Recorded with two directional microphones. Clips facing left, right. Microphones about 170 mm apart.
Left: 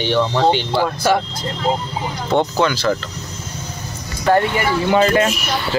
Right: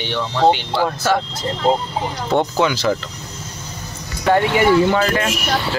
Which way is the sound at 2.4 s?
15° right (ahead or behind).